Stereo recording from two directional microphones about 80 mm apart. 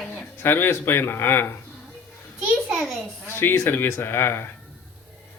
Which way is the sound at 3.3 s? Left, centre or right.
Left.